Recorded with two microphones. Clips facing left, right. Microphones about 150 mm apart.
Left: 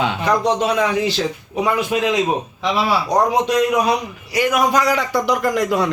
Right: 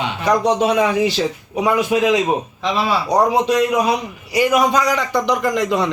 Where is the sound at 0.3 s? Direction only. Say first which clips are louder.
Right 3 dB; 10° right (ahead or behind).